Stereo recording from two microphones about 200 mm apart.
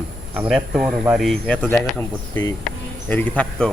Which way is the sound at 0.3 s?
5° right (ahead or behind).